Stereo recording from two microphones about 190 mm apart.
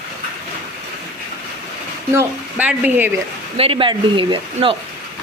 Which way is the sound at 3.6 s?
25° right (ahead or behind).